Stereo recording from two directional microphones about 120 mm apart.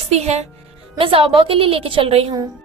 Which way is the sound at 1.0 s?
45° right (ahead or behind).